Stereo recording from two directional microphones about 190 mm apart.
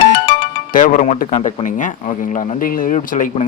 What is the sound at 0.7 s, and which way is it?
Speech, 45° left (ahead or behind).